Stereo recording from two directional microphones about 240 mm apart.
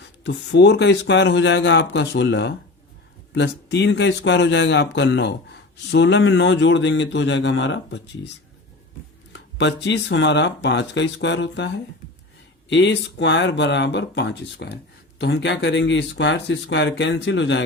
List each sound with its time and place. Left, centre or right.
0.3 s speech: left
9.3 s speech: left